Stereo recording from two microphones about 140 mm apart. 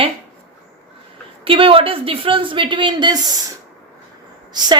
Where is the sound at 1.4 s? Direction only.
40° right (ahead or behind).